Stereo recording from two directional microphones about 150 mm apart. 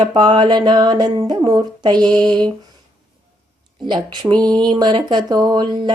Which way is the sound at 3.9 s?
30° right (ahead or behind).